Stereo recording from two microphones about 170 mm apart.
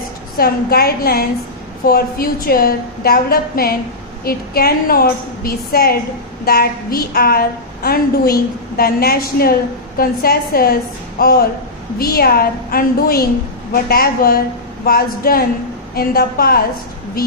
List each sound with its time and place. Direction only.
0.3 s a woman's voice: 65° left (ahead or behind)